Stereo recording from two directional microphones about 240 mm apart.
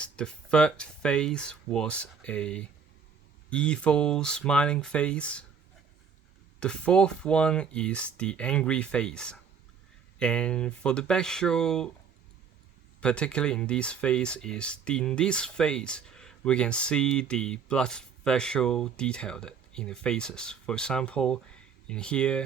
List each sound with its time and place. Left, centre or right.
0.0 s speech: centre
6.6 s speech: centre
13.0 s speech: centre